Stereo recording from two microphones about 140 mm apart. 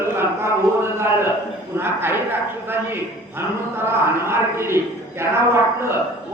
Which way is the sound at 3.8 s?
15° right (ahead or behind).